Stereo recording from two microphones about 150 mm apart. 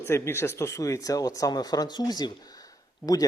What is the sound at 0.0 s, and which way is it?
Speech, 15° left (ahead or behind).